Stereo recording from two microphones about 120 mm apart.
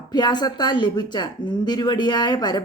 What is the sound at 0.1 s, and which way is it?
Speech, 35° left (ahead or behind).